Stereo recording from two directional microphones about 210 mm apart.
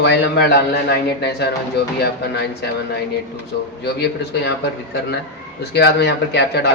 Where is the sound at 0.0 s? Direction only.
50° left (ahead or behind).